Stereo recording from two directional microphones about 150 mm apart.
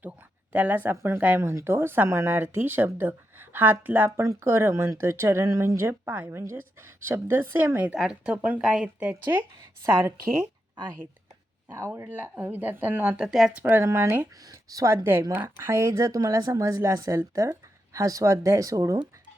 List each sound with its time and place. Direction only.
0.5 s a woman's voice: 10° right (ahead or behind)
11.7 s a woman's voice: 20° right (ahead or behind)